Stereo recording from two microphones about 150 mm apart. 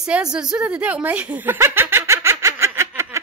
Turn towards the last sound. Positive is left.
turn(degrees=-15)  # may be behind; listen again after turning